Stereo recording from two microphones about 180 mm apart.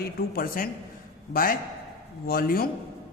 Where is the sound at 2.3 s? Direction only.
55° left (ahead or behind).